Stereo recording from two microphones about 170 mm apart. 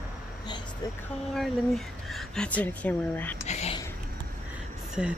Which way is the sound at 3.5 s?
40° left (ahead or behind).